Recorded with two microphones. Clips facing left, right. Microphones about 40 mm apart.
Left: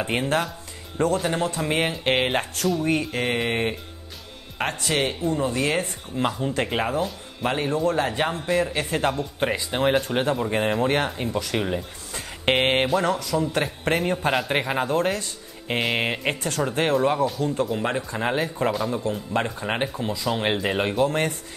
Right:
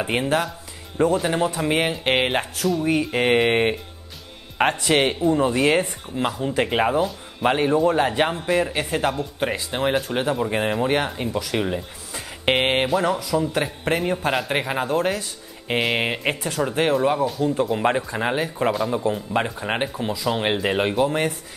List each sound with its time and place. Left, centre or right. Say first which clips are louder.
0.0 s speech: right 2 dB; centre
3.1 s a man's voice: right 6 dB; right
6.1 s speech: right 1 dB; centre
6.5 s a man's voice: right 4 dB; centre
8.8 s speech: right 1 dB; centre
17.7 s a man's voice: right 5 dB; centre
18.0 s speech: right 1 dB; centre